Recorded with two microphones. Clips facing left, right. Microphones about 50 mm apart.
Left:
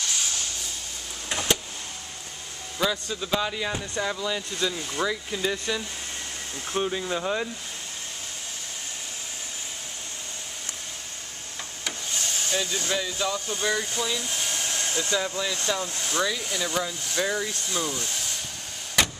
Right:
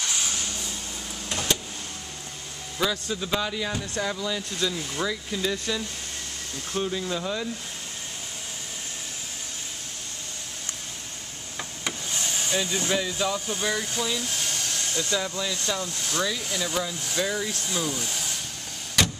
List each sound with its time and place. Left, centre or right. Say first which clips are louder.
2.8 s speech: even; centre
3.4 s speech: even; centre
11.8 s speech: even; centre
16.2 s speech: left 1 dB; centre
19.0 s a sound: even; centre